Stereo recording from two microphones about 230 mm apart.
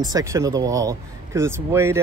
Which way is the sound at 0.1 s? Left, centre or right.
Centre.